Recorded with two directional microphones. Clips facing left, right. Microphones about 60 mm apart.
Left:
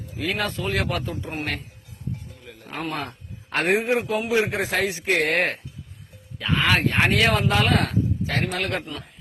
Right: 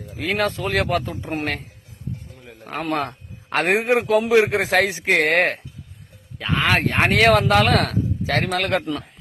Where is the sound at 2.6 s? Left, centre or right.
Right.